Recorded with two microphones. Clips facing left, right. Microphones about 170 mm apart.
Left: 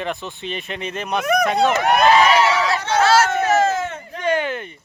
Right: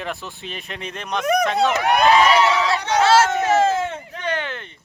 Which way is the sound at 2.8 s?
15° right (ahead or behind).